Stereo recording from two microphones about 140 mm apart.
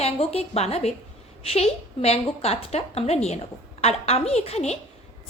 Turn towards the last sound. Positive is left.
turn(degrees=50)  # may be behind; listen again after turning